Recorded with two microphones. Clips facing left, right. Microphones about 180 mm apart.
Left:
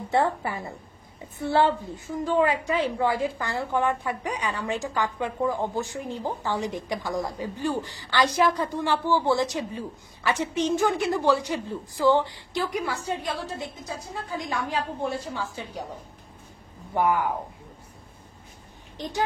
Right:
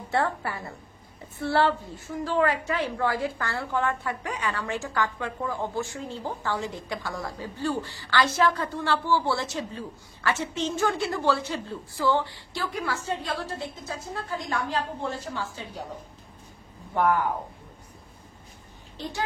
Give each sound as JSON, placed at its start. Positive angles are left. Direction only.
{"t": 0.1, "sound": "a woman's voice", "side_deg": 20}
{"t": 16.9, "sound": "a woman's voice", "side_deg": 10}
{"t": 18.9, "sound": "a woman's voice", "side_deg": 15}